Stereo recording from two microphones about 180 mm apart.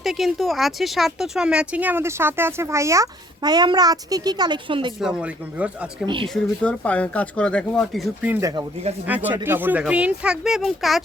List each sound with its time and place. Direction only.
0.0 s speech: centre (ahead or behind); by 4.9 s 25° right (ahead or behind)
4.9 s speech: 5° right (ahead or behind)
6.2 s speech: 5° left (ahead or behind)
8.3 s speech: 20° right (ahead or behind); by 11.0 s centre (ahead or behind)